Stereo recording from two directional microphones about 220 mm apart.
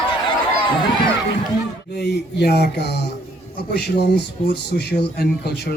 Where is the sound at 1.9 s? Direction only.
50° left (ahead or behind).